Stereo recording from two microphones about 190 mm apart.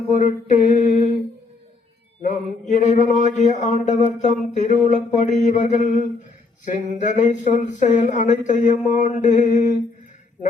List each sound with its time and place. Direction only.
0.1 s speech: 40° left (ahead or behind)
2.2 s speech: 40° left (ahead or behind)